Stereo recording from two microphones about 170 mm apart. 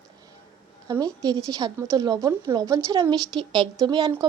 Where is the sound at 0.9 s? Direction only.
20° right (ahead or behind).